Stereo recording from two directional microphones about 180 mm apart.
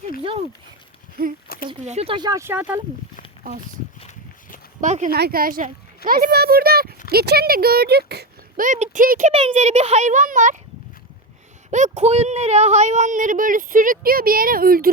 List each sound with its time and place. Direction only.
1.8 s speech: 35° right (ahead or behind); by 2.8 s 10° right (ahead or behind)
4.8 s speech: 45° right (ahead or behind)
5.1 s speech: 60° right (ahead or behind)
8.6 s speech: 45° right (ahead or behind)
9.5 s speech: 40° right (ahead or behind)
11.7 s speech: 40° right (ahead or behind)